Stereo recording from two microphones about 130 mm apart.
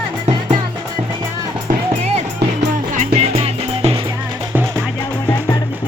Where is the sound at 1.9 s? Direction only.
55° right (ahead or behind).